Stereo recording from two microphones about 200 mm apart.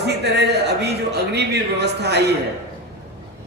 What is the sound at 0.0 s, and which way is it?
Speech, 55° right (ahead or behind).